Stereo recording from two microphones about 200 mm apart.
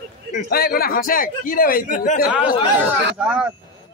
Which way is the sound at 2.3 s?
5° right (ahead or behind).